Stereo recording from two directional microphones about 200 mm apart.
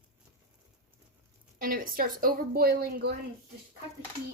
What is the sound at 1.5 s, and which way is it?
A woman's voice, 45° right (ahead or behind).